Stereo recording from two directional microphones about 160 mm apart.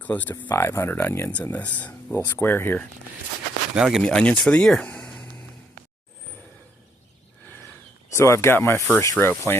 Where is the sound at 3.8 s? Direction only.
5° right (ahead or behind).